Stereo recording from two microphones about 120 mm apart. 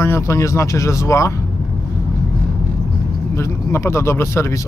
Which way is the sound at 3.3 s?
20° left (ahead or behind).